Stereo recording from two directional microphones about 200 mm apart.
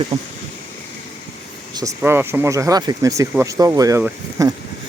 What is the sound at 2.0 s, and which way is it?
Speech, 10° right (ahead or behind).